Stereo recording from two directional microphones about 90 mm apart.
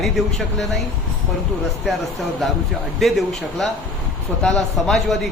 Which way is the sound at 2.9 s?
Centre (ahead or behind).